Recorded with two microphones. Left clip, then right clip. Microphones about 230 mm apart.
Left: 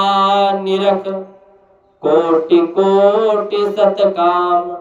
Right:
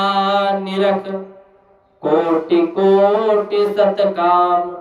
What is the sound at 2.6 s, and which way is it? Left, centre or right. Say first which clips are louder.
Mantra: right 2 dB; right.